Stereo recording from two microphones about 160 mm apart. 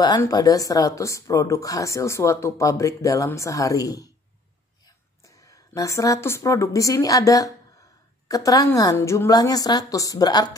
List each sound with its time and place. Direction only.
0.0 s speech: 25° left (ahead or behind)
5.2 s a woman's voice: 20° left (ahead or behind)